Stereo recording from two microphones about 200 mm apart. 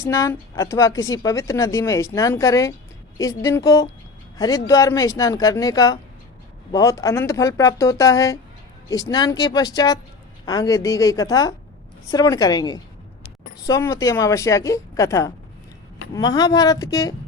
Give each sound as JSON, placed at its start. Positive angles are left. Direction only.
{"t": 0.0, "sound": "a woman's voice", "side_deg": 15}